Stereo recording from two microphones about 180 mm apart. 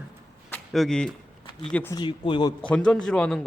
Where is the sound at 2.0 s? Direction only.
25° left (ahead or behind).